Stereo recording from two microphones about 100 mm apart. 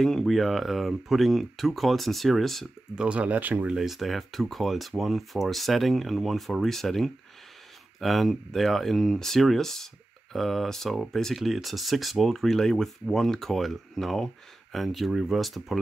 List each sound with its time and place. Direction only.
0.0 s speech: centre (ahead or behind)
3.0 s speech: 10° right (ahead or behind)
3.7 s speech: centre (ahead or behind)